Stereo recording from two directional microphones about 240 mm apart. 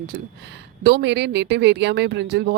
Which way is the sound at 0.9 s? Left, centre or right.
Right.